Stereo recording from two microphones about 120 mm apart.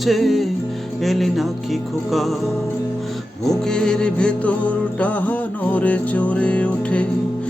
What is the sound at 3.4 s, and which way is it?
Music, 5° left (ahead or behind).